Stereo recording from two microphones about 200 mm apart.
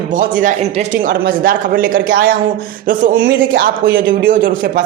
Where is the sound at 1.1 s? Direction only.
45° right (ahead or behind).